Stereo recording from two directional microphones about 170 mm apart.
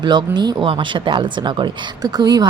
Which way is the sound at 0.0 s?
25° right (ahead or behind).